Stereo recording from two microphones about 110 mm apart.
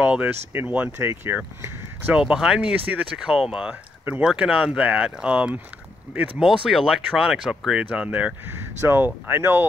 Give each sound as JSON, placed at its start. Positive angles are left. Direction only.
{"t": 0.0, "sound": "speech", "side_deg": -15}
{"t": 2.2, "sound": "speech", "side_deg": -5}